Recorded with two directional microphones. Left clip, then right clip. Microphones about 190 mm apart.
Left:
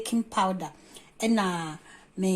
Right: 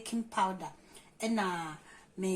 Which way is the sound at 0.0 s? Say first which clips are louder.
Left 6 dB; 50° left (ahead or behind).